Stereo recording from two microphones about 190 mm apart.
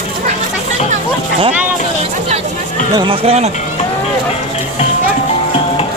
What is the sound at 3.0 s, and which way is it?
Speech, 30° right (ahead or behind).